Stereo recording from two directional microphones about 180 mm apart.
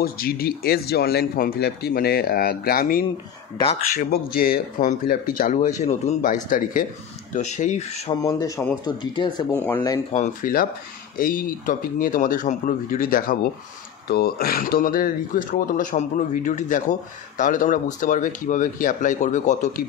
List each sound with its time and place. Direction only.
0.0 s speech: 55° left (ahead or behind); by 8.1 s 40° left (ahead or behind)
8.1 s speech: 20° left (ahead or behind)
9.7 s speech: 10° left (ahead or behind)
10.1 s speech: 45° left (ahead or behind)